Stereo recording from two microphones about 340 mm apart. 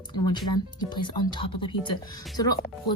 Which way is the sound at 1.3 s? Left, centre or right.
Centre.